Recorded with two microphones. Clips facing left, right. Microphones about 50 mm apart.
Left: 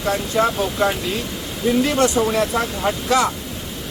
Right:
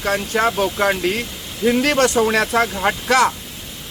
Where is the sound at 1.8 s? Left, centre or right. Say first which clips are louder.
Right 1 dB; right.